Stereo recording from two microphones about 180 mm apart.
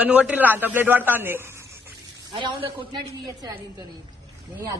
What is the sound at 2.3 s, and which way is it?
Speech, 25° right (ahead or behind).